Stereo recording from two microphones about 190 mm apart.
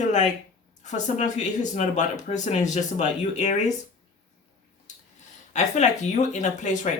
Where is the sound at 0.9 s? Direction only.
40° left (ahead or behind).